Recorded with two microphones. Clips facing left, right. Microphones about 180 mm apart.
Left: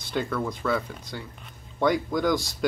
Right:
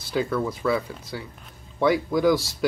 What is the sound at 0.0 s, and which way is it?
Speech, 5° right (ahead or behind).